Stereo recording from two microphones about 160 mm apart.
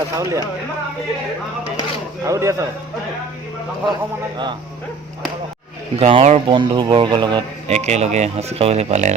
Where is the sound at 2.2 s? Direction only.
20° right (ahead or behind).